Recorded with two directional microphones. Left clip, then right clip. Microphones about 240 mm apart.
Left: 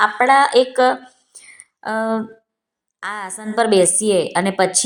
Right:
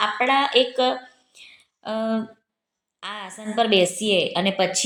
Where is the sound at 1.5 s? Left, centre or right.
Left.